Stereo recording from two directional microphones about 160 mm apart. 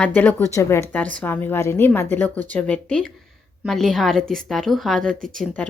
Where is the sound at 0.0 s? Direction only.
10° left (ahead or behind).